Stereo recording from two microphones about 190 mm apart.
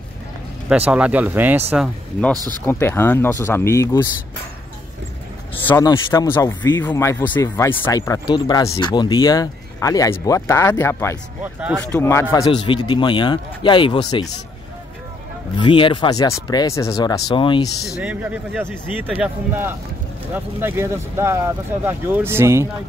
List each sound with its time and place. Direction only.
0.7 s speech: 5° right (ahead or behind)
2.6 s speech: 10° left (ahead or behind)
5.7 s speech: 20° left (ahead or behind)
12.4 s speech: 25° left (ahead or behind)
15.6 s speech: 25° left (ahead or behind)
17.9 s speech: 10° right (ahead or behind)